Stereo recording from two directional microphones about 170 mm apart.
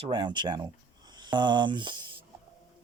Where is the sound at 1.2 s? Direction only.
25° right (ahead or behind).